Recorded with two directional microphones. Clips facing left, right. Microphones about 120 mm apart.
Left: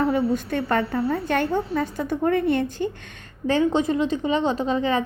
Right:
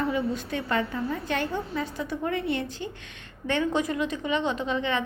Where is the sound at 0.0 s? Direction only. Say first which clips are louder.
Left 6 dB; 50° left (ahead or behind).